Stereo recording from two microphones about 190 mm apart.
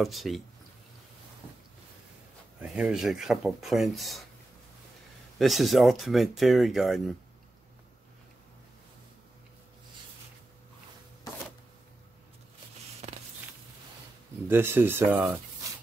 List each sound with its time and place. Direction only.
0.0 s speech: centre (ahead or behind)
2.7 s speech: 5° right (ahead or behind)
5.4 s speech: centre (ahead or behind)
13.0 s a sound: 35° right (ahead or behind)
14.5 s speech: 10° right (ahead or behind)